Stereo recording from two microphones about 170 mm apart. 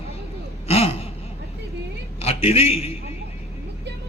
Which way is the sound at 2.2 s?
35° left (ahead or behind).